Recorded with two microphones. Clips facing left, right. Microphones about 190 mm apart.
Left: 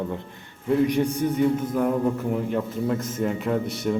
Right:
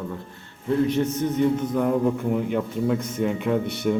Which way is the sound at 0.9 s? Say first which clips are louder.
Even; 15° left (ahead or behind).